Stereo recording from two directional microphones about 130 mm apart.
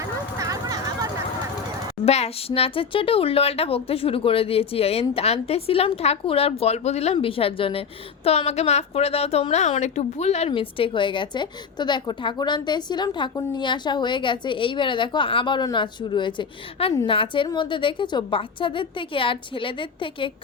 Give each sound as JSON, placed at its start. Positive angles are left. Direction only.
{"t": 0.0, "sound": "vehicle", "side_deg": -25}
{"t": 2.0, "sound": "a woman's voice", "side_deg": 55}